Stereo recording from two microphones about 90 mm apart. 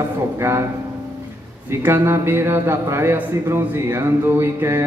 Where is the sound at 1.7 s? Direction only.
30° right (ahead or behind).